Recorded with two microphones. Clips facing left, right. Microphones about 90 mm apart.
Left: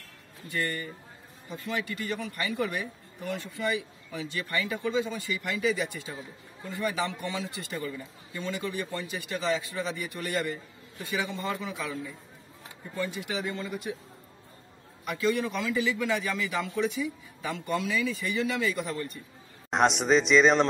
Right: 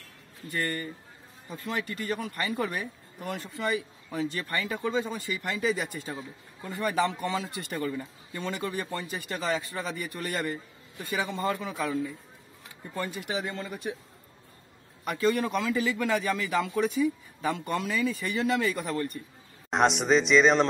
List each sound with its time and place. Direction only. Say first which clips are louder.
0.5 s a man's voice: right 1 dB; 45° right (ahead or behind)
12.9 s speech: even; 40° right (ahead or behind)
15.0 s a man's voice: right 2 dB; 40° right (ahead or behind)
19.7 s speech: even; centre (ahead or behind)